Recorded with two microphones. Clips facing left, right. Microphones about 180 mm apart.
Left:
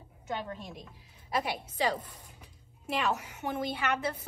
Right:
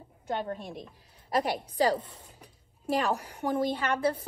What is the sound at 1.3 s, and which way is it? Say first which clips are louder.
Speech: right 4 dB; 40° right (ahead or behind).